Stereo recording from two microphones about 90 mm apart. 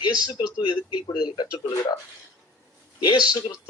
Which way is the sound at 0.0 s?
50° left (ahead or behind).